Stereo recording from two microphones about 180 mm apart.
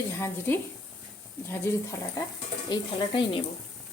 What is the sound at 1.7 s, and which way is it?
Speech, 15° left (ahead or behind).